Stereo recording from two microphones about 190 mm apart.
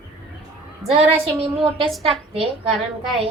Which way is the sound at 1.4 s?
30° right (ahead or behind).